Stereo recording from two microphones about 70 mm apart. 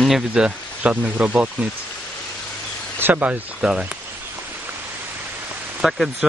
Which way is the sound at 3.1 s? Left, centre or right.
Centre.